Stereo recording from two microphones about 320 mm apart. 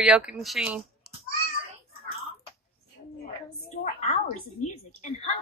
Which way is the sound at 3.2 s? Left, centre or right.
Left.